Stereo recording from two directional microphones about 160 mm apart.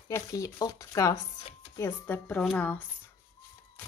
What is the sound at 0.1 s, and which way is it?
A woman's voice, 20° left (ahead or behind).